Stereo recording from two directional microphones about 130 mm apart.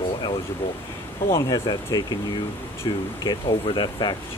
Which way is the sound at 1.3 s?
30° left (ahead or behind).